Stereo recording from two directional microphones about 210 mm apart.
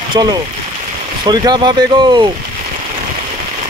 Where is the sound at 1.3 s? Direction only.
20° right (ahead or behind).